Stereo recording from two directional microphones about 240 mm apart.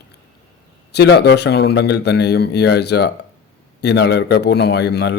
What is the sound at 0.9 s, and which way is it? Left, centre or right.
Speech, left.